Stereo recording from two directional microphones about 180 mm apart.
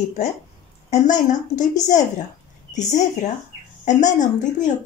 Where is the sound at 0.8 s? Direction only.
45° left (ahead or behind).